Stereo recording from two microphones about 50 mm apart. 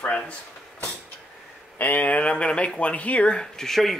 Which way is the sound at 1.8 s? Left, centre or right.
Left.